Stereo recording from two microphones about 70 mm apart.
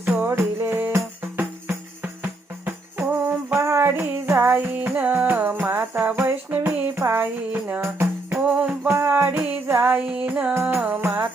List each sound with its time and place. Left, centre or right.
0.3 s music: right
10.1 s music: centre
10.5 s music: right